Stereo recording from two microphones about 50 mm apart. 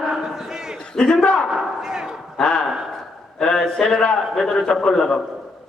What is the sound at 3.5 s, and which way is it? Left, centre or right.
Speech, centre.